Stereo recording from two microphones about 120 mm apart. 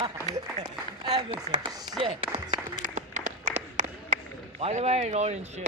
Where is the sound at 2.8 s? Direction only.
90° right.